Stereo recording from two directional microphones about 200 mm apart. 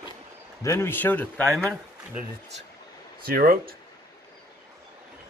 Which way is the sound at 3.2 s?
45° right (ahead or behind).